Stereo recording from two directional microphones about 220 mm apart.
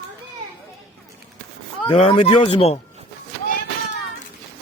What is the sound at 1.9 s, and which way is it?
Speech, 25° left (ahead or behind).